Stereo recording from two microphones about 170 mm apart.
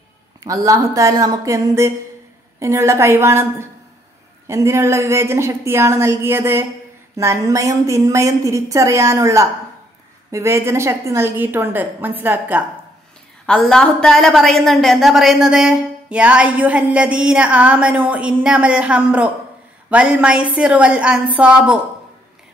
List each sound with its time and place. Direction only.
0.4 s a woman's voice: 20° right (ahead or behind)
13.5 s a woman's voice: 5° left (ahead or behind)